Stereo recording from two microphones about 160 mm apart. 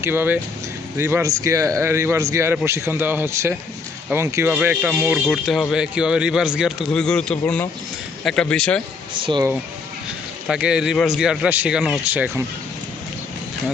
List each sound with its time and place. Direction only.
0.0 s speech: 15° right (ahead or behind)
5.2 s speech: centre (ahead or behind)
9.1 s speech: 30° right (ahead or behind)
10.4 s speech: 5° right (ahead or behind)